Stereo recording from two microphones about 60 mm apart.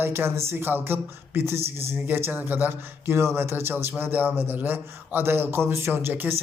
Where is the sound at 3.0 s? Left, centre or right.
Right.